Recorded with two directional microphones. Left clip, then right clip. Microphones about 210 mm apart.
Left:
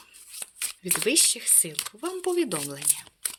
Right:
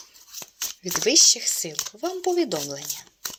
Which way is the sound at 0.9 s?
25° left (ahead or behind).